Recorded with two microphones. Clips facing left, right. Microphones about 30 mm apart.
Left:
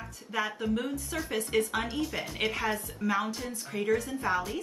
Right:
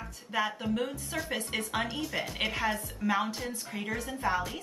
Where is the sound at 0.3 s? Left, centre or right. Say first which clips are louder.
Even; centre.